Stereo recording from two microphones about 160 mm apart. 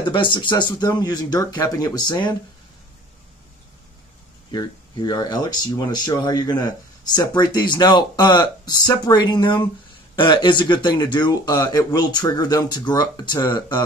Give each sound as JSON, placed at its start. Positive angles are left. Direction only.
{"t": 0.0, "sound": "speech", "side_deg": 30}
{"t": 4.5, "sound": "speech", "side_deg": 25}